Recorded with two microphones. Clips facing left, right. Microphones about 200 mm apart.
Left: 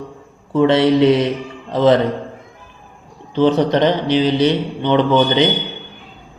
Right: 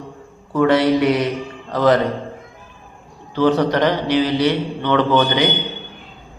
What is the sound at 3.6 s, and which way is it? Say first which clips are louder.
A man's voice: left 2 dB; 20° left (ahead or behind).